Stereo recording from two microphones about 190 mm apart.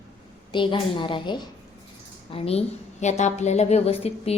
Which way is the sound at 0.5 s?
25° left (ahead or behind).